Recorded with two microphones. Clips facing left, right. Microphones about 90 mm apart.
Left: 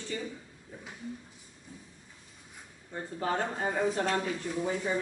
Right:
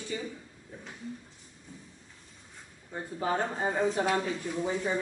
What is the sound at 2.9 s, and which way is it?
Speech, 10° right (ahead or behind).